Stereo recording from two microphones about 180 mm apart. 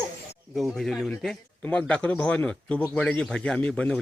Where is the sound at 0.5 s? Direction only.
Centre (ahead or behind).